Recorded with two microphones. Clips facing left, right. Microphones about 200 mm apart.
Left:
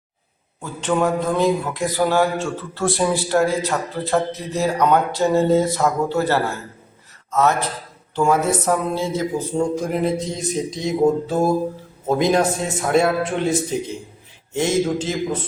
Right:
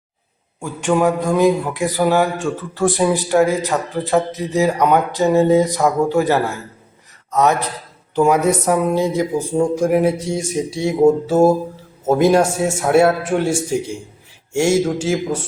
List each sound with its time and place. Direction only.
0.6 s a man's voice: 15° right (ahead or behind)
12.2 s speech: 10° right (ahead or behind)